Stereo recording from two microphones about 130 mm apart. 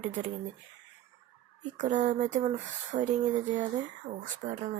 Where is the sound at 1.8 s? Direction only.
75° right (ahead or behind).